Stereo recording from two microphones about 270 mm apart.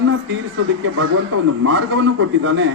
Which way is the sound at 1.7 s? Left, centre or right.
Right.